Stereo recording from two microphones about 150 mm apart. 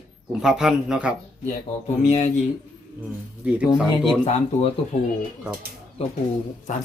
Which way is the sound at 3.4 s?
10° right (ahead or behind).